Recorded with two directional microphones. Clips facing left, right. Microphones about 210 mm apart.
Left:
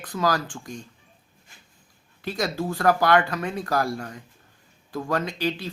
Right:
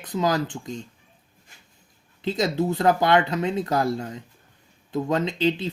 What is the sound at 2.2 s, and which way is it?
Speech, 20° right (ahead or behind).